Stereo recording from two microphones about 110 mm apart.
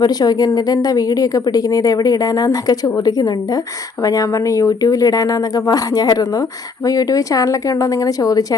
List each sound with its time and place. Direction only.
0.0 s a woman's voice: 35° left (ahead or behind)